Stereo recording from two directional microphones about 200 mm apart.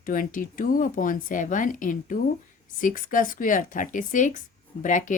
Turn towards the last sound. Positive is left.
turn(degrees=40)  # may be behind; listen again after turning